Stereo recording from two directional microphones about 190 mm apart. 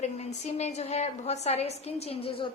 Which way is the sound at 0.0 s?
35° left (ahead or behind).